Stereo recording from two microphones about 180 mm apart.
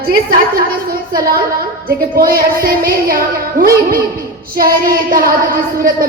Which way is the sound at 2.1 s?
55° right (ahead or behind).